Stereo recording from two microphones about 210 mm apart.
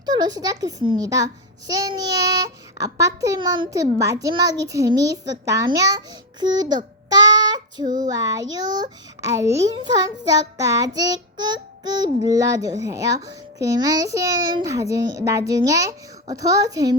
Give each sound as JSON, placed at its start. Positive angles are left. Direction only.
{"t": 0.0, "sound": "a child's voice", "side_deg": -20}
{"t": 7.1, "sound": "child singing", "side_deg": -20}
{"t": 7.9, "sound": "a sound", "side_deg": -40}
{"t": 8.1, "sound": "a child's voice", "side_deg": -15}